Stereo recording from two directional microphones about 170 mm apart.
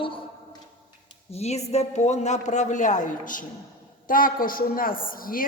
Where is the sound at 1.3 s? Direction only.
40° left (ahead or behind).